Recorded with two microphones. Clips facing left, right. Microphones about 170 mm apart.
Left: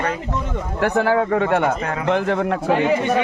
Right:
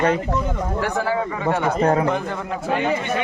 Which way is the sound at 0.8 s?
65° left (ahead or behind).